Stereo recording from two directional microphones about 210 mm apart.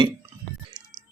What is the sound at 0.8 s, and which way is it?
Music, 20° right (ahead or behind).